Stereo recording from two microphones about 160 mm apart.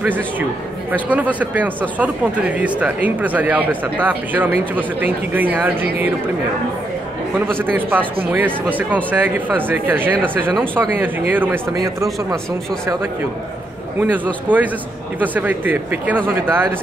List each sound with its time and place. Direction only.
0.0 s speech: 10° right (ahead or behind)
7.5 s speech: 10° right (ahead or behind)
13.9 s speech: 10° right (ahead or behind)